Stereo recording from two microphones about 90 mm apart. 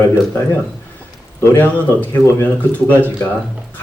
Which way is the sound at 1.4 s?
20° left (ahead or behind).